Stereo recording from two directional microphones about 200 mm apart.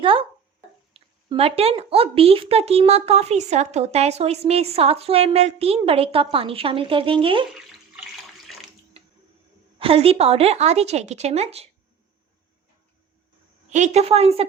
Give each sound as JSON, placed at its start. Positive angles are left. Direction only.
{"t": 0.0, "sound": "speech", "side_deg": -25}
{"t": 9.7, "sound": "a woman's voice", "side_deg": -30}
{"t": 13.7, "sound": "a woman's voice", "side_deg": -35}